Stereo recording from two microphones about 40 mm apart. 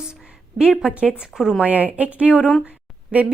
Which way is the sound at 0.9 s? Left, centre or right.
Right.